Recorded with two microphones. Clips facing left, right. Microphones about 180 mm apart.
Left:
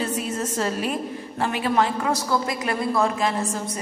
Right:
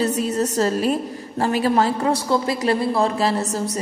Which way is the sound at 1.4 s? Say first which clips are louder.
Right 4 dB; 35° right (ahead or behind).